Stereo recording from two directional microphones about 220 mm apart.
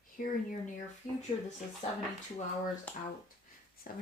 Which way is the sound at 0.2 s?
40° left (ahead or behind).